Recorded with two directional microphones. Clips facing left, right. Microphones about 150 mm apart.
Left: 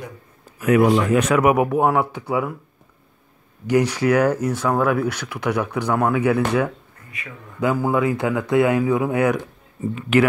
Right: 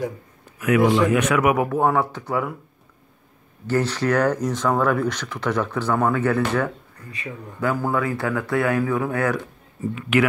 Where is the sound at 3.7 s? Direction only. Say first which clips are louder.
Left 3 dB; 15° left (ahead or behind).